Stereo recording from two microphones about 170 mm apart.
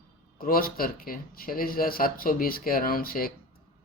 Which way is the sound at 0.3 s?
60° left (ahead or behind).